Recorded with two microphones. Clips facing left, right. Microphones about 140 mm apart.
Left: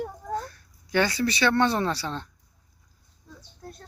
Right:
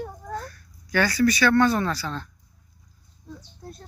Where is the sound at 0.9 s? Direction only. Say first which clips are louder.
Right 3 dB; 25° left (ahead or behind).